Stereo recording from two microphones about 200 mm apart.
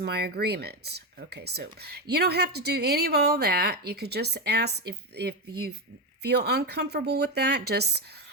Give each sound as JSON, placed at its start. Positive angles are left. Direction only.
{"t": 0.0, "sound": "speech", "side_deg": -55}